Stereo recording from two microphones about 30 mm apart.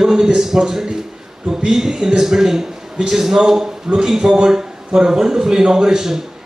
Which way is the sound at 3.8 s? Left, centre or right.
Right.